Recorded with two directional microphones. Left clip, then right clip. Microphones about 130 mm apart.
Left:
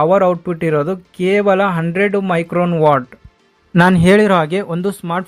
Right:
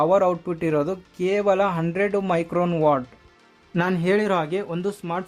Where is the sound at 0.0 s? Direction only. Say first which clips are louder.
Left 6 dB; 30° left (ahead or behind).